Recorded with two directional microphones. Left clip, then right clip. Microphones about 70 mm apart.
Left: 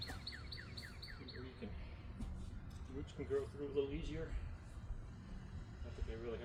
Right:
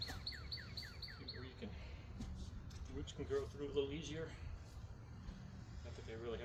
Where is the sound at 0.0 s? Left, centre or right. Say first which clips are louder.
Right 1 dB; centre.